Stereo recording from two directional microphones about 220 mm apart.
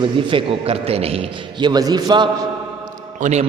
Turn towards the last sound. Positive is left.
turn(degrees=-30)  # may be behind; listen again after turning